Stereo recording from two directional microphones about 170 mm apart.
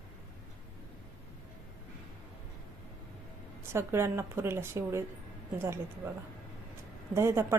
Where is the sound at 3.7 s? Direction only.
15° right (ahead or behind).